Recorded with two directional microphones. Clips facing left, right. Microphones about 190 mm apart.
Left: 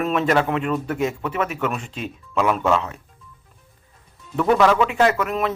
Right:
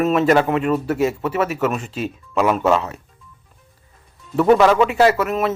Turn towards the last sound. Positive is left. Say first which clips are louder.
# right 3 dB
turn(degrees=-5)  # may be behind; listen again after turning